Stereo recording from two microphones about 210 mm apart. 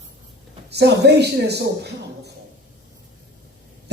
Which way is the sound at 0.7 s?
50° right (ahead or behind).